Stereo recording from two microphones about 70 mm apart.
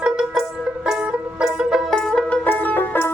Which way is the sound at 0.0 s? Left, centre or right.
Centre.